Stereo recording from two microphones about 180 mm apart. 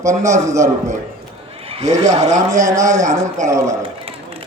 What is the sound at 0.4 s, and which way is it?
Speech, 15° right (ahead or behind).